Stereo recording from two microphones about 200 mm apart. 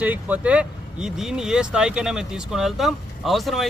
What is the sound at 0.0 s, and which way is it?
Speech, 10° right (ahead or behind).